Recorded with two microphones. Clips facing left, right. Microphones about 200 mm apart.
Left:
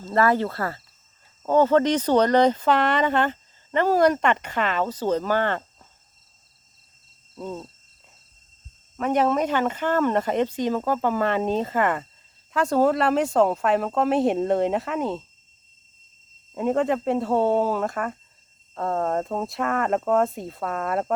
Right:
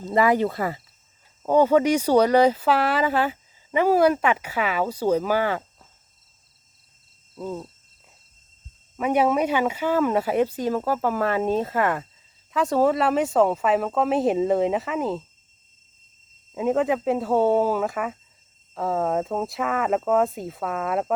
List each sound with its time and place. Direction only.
0.0 s speech: 15° right (ahead or behind)
7.3 s speech: 5° right (ahead or behind)
9.0 s speech: 10° right (ahead or behind)
16.6 s speech: centre (ahead or behind)